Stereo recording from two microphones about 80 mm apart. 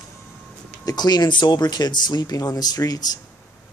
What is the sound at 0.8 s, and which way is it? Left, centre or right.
Speech, left.